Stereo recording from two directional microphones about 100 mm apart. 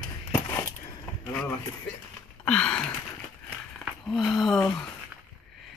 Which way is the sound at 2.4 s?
10° left (ahead or behind).